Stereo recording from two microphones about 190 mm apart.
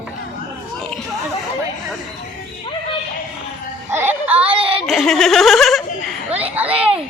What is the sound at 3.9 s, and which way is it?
Music, 10° right (ahead or behind).